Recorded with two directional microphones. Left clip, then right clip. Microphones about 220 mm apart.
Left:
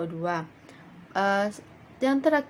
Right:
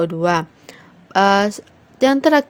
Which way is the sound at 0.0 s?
45° right (ahead or behind).